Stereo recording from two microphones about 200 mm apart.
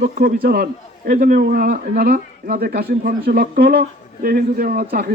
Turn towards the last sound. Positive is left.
turn(degrees=-50)  # may be behind; listen again after turning